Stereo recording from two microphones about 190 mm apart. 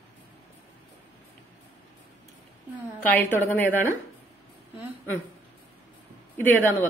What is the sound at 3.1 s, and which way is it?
Speech, 10° left (ahead or behind).